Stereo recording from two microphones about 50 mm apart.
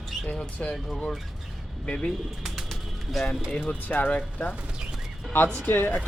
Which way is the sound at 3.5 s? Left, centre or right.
Left.